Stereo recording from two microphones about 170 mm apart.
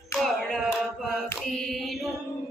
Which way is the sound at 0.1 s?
Centre (ahead or behind).